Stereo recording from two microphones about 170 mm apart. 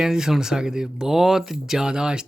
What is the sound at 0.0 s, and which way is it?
Speech, 5° right (ahead or behind).